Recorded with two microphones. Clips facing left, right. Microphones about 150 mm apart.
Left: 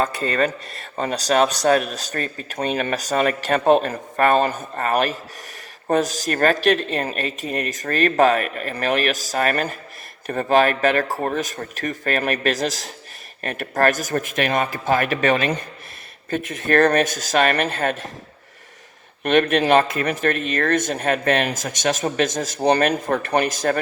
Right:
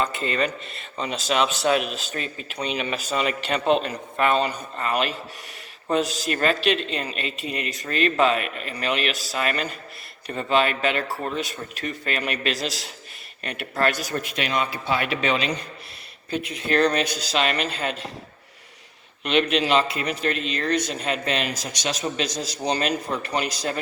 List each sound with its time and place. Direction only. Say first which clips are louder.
0.0 s speech: left 4 dB; 40° left (ahead or behind)
19.2 s speech: left 4 dB; 50° left (ahead or behind)